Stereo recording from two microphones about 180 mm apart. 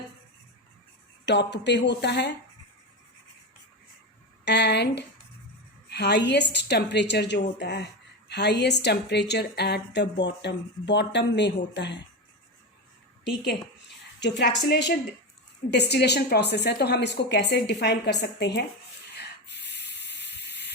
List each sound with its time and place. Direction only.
1.2 s a woman's voice: 75° left (ahead or behind)
4.4 s a woman's voice: 70° left (ahead or behind)
14.2 s a woman's voice: 70° left (ahead or behind)
19.1 s spray: 70° left (ahead or behind)